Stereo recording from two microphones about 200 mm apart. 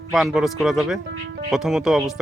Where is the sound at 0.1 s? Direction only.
Centre (ahead or behind).